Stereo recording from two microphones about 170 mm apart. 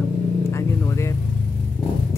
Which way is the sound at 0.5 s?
15° left (ahead or behind).